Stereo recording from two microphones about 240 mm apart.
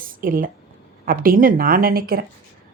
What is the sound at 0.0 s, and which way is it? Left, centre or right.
Speech, right.